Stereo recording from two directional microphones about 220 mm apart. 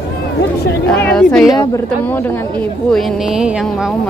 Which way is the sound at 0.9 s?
5° left (ahead or behind).